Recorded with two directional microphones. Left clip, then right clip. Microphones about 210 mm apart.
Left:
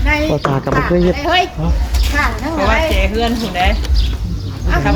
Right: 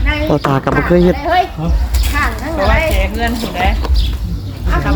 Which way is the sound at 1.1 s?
55° left (ahead or behind).